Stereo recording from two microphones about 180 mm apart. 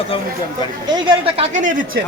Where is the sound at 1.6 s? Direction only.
45° right (ahead or behind).